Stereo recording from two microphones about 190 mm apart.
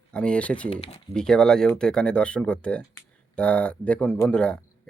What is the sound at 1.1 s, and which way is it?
Speech, 5° left (ahead or behind).